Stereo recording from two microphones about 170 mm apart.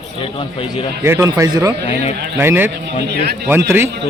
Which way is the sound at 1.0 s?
15° right (ahead or behind).